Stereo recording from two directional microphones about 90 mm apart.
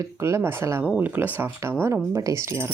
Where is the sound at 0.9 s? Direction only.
15° right (ahead or behind).